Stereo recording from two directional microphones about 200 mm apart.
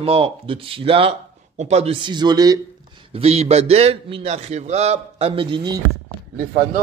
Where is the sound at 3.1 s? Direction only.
30° right (ahead or behind).